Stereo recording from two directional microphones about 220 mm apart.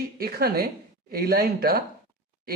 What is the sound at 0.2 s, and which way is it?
A man's voice, 45° right (ahead or behind).